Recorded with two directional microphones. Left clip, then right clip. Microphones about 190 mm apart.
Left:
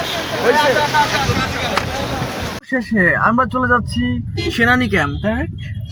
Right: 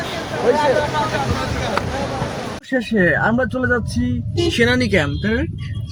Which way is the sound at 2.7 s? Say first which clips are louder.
Left 1 dB; 10° right (ahead or behind).